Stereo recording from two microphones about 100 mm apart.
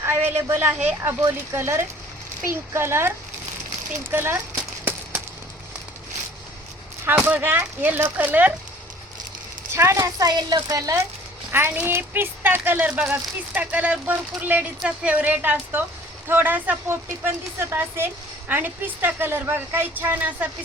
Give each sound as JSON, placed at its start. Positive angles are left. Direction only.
{"t": 0.0, "sound": "a woman's voice", "side_deg": -25}
{"t": 4.1, "sound": "a sound", "side_deg": -20}
{"t": 7.3, "sound": "speech", "side_deg": -20}
{"t": 9.7, "sound": "speech", "side_deg": -25}
{"t": 10.2, "sound": "a woman's voice", "side_deg": -40}
{"t": 11.5, "sound": "speech", "side_deg": -20}